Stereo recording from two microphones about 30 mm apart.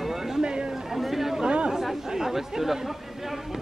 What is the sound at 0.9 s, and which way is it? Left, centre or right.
Chatter, centre.